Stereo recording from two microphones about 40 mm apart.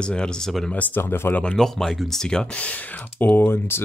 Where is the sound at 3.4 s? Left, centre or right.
Left.